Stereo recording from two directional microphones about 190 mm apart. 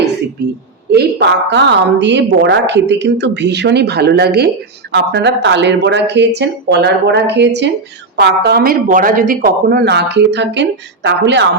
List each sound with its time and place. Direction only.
0.9 s a woman's voice: 60° right (ahead or behind)